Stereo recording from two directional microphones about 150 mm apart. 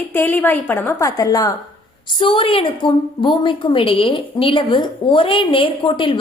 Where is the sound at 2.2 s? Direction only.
35° left (ahead or behind).